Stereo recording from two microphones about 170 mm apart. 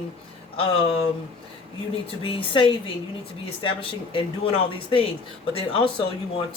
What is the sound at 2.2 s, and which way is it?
Speech, 30° left (ahead or behind).